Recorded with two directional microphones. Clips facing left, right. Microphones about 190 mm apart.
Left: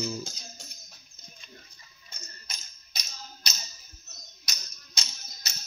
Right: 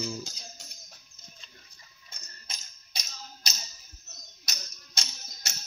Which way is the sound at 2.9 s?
30° right (ahead or behind).